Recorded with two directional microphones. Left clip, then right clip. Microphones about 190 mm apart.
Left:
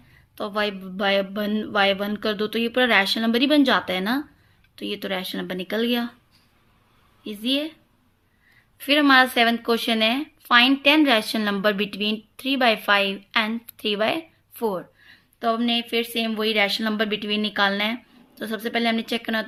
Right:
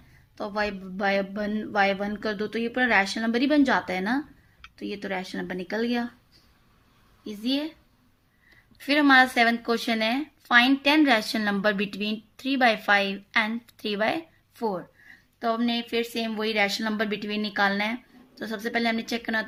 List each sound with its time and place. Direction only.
0.3 s speech: 55° left (ahead or behind)
7.3 s a woman's voice: 50° left (ahead or behind)
8.8 s a woman's voice: 45° left (ahead or behind)